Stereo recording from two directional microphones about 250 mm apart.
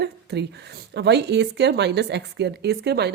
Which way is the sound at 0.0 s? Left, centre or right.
Right.